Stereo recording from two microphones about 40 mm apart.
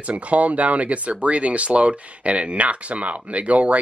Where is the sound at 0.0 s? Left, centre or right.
Right.